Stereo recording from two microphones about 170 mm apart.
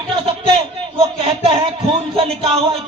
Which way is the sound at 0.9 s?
35° right (ahead or behind).